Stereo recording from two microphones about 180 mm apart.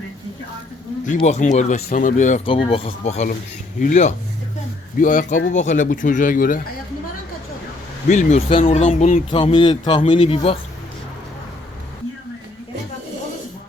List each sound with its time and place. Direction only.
1.0 s speech: 40° left (ahead or behind)
2.4 s speech: 30° left (ahead or behind); by 6.6 s 50° left (ahead or behind)
8.0 s speech: 40° left (ahead or behind)
9.3 s speech: 30° left (ahead or behind)